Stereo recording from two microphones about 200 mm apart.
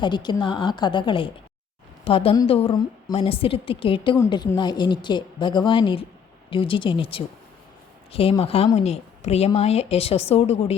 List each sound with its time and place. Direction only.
0.0 s speech: 20° left (ahead or behind)